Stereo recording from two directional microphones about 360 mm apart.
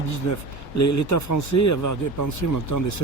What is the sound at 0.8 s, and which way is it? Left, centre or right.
Speech, left.